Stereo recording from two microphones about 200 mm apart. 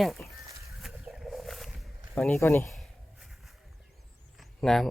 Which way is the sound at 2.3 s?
15° left (ahead or behind).